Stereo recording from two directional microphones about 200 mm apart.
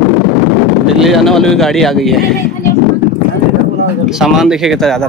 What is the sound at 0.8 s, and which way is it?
Speech, centre (ahead or behind).